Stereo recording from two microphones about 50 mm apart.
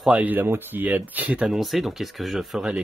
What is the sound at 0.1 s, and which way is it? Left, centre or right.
Speech, right.